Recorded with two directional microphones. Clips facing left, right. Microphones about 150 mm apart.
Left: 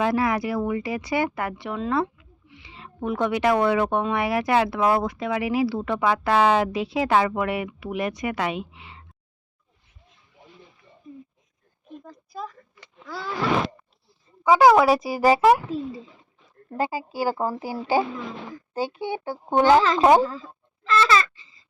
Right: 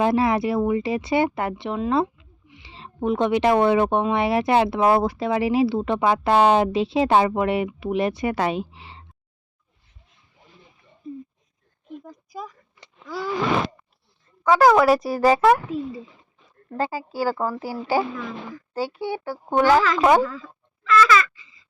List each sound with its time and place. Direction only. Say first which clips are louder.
0.0 s speech: right 3 dB; 25° right (ahead or behind)
11.1 s a sound: right 7 dB; 30° right (ahead or behind)
12.0 s speech: left 3 dB; 15° right (ahead or behind)
13.1 s gasp: right 4 dB; 15° right (ahead or behind)
14.4 s a woman's voice: even; 5° left (ahead or behind)
16.6 s speech: even; 15° left (ahead or behind); by 21.6 s 30° left (ahead or behind)